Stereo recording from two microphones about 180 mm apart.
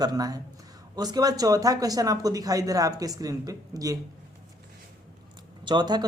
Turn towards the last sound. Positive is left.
turn(degrees=-25)  # may be behind; listen again after turning